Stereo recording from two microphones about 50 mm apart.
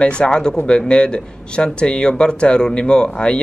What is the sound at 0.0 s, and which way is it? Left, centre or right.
Speech, centre.